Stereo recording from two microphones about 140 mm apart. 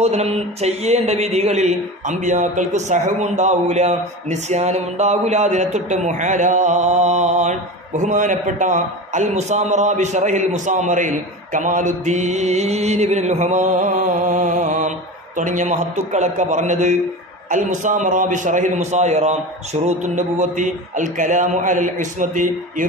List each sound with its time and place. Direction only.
0.0 s a man's voice: 50° right (ahead or behind); by 22.8 s 70° right (ahead or behind)